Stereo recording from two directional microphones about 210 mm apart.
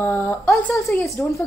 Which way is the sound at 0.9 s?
Centre (ahead or behind).